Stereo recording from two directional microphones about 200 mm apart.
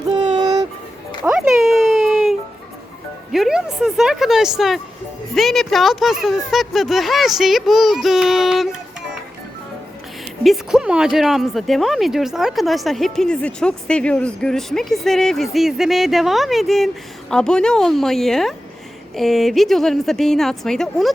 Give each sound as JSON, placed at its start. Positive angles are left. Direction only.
{"t": 0.3, "sound": "music", "side_deg": -20}
{"t": 1.2, "sound": "a sound", "side_deg": -5}
{"t": 3.3, "sound": "a woman's voice", "side_deg": 0}
{"t": 10.4, "sound": "speech", "side_deg": 0}